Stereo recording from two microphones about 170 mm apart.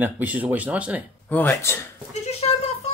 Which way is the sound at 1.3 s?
10° left (ahead or behind).